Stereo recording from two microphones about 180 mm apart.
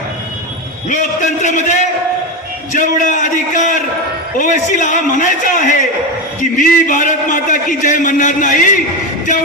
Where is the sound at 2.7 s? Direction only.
45° left (ahead or behind).